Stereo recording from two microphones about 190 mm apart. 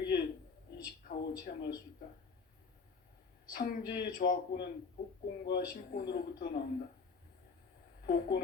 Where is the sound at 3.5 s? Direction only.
50° left (ahead or behind).